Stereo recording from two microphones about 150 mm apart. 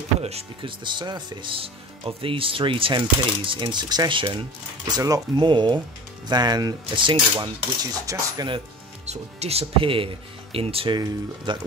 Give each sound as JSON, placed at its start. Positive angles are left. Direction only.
{"t": 0.2, "sound": "speech", "side_deg": -45}
{"t": 4.9, "sound": "cutlery", "side_deg": -25}
{"t": 9.0, "sound": "speech", "side_deg": -45}